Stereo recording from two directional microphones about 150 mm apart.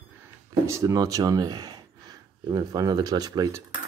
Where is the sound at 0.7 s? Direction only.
20° right (ahead or behind).